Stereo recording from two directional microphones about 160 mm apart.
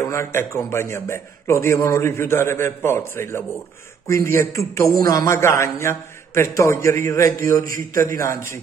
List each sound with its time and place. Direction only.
0.0 s a man's voice: 15° left (ahead or behind)